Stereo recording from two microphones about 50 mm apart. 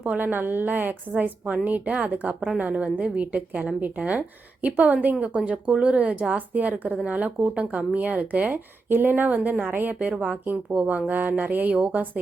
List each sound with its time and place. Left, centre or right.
0.0 s a woman's voice: right
8.9 s a woman's voice: right
10.4 s speech: right
10.8 s speech: right